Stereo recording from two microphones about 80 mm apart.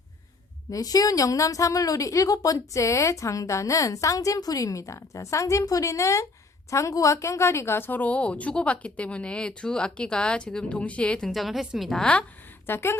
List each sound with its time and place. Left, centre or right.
0.7 s a woman's voice: left; by 11.3 s centre
11.3 s a woman's voice: centre
11.9 s a woman's voice: centre
12.6 s a woman's voice: left